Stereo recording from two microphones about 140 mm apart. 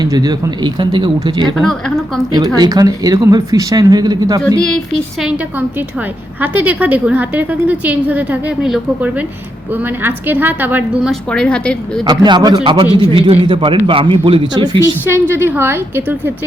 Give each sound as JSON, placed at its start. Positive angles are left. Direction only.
{"t": 0.0, "sound": "a man's voice", "side_deg": -25}
{"t": 1.5, "sound": "a woman's voice", "side_deg": 0}
{"t": 2.6, "sound": "speech", "side_deg": -25}
{"t": 6.4, "sound": "a woman's voice", "side_deg": -15}
{"t": 11.1, "sound": "speech", "side_deg": 5}
{"t": 12.0, "sound": "a man's voice", "side_deg": -30}
{"t": 15.1, "sound": "a woman's voice", "side_deg": -15}